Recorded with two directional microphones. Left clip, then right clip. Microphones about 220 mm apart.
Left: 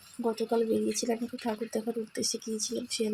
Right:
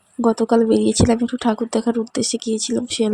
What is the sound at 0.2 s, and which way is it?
Speech, 30° right (ahead or behind).